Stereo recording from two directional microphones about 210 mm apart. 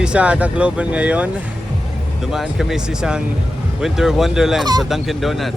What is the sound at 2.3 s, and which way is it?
Speech, centre (ahead or behind).